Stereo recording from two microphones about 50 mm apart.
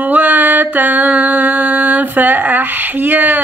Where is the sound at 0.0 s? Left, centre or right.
Right.